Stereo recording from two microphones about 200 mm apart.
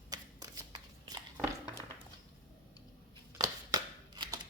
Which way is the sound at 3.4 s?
20° right (ahead or behind).